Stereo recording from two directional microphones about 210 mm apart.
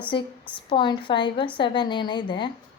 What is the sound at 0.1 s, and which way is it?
A woman's voice, 25° left (ahead or behind).